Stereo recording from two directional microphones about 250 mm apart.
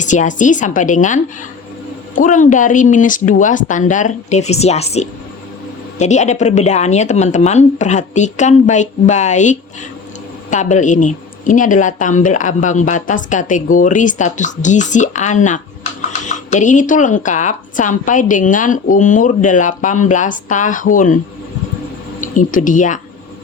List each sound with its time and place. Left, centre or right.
0.0 s speech: left
22.2 s speech: left